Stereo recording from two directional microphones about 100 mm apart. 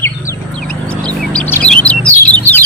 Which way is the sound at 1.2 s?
10° left (ahead or behind).